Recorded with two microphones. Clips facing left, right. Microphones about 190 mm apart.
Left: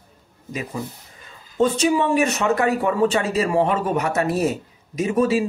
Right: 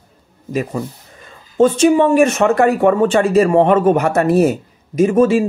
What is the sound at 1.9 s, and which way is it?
Speech, 45° right (ahead or behind).